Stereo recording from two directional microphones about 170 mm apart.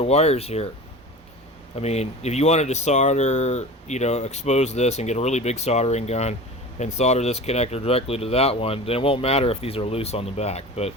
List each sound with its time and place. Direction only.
0.0 s speech: 40° left (ahead or behind)
1.7 s speech: 40° left (ahead or behind)